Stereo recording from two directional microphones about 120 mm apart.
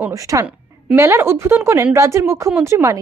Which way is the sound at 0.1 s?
25° right (ahead or behind).